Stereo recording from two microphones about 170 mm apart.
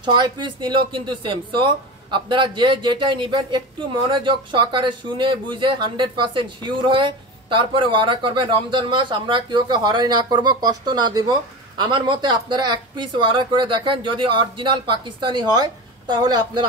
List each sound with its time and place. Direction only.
0.0 s speech: 25° right (ahead or behind)